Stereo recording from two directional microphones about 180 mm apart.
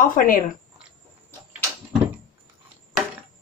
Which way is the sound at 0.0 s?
50° left (ahead or behind).